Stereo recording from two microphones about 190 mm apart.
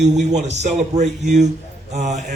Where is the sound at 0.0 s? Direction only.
40° right (ahead or behind).